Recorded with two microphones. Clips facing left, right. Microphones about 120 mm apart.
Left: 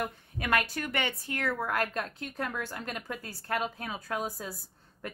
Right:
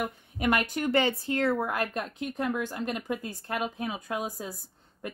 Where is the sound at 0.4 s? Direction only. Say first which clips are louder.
Right 3 dB; 20° right (ahead or behind).